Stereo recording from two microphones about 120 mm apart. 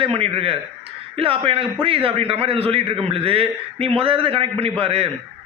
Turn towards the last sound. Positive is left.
turn(degrees=-55)  # may be behind; listen again after turning